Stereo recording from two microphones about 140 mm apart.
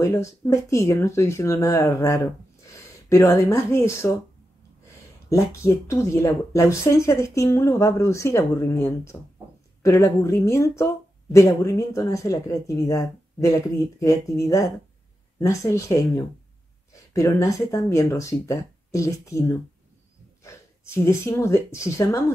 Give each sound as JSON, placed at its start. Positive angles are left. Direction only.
{"t": 0.0, "sound": "speech", "side_deg": 20}
{"t": 5.3, "sound": "speech", "side_deg": 20}